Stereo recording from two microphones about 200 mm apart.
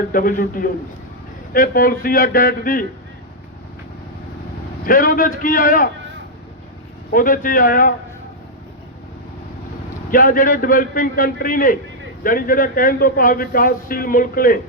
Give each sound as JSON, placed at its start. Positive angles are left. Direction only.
{"t": 0.1, "sound": "a man's voice", "side_deg": 45}
{"t": 4.9, "sound": "a man's voice", "side_deg": 45}
{"t": 7.1, "sound": "a man's voice", "side_deg": 45}
{"t": 10.1, "sound": "a man's voice", "side_deg": 45}